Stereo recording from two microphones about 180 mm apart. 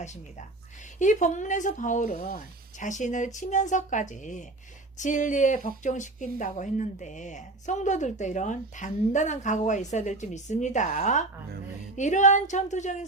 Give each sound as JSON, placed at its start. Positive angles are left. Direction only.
{"t": 0.9, "sound": "a woman's voice", "side_deg": 45}